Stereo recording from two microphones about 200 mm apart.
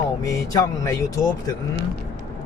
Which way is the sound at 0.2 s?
15° left (ahead or behind).